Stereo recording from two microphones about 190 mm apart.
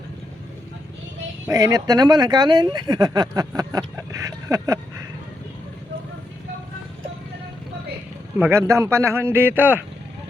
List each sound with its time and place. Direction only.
1.5 s speech: 20° right (ahead or behind)
8.4 s speech: 15° right (ahead or behind)